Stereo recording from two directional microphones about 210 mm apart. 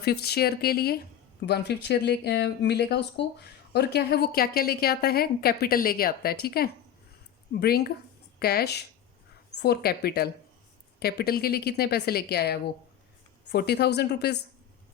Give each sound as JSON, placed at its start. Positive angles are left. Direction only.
{"t": 0.0, "sound": "speech", "side_deg": 50}